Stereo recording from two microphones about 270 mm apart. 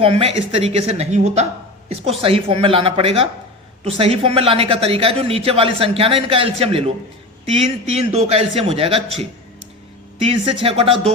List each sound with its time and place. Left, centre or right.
0.0 s a man's voice: right
10.2 s a man's voice: right